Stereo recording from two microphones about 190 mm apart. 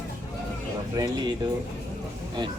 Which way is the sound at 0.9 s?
20° right (ahead or behind).